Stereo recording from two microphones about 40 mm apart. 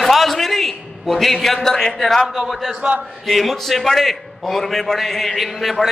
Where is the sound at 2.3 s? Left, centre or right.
Centre.